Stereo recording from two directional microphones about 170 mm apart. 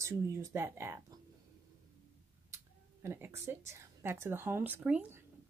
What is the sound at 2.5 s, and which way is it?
Speech, 15° right (ahead or behind).